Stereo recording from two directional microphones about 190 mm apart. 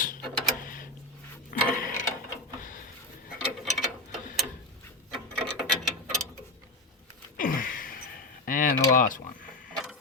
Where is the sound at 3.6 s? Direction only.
Centre (ahead or behind).